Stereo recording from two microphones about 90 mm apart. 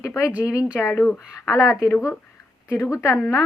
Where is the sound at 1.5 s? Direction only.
35° left (ahead or behind).